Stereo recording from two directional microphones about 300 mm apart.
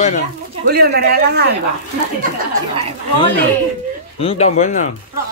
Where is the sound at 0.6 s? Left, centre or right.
Right.